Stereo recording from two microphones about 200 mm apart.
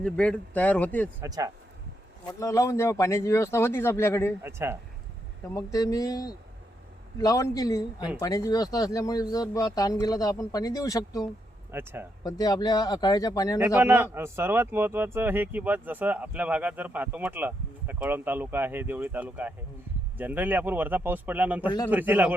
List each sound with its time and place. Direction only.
0.0 s speech: 5° left (ahead or behind)
1.2 s speech: 15° right (ahead or behind)
2.2 s speech: 15° left (ahead or behind)
4.4 s speech: 10° right (ahead or behind)
5.5 s speech: 15° left (ahead or behind)
11.7 s speech: 10° right (ahead or behind)
12.2 s speech: 20° left (ahead or behind)
13.6 s speech: 10° right (ahead or behind)